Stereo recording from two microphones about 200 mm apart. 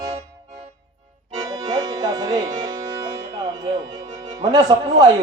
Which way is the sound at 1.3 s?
15° right (ahead or behind).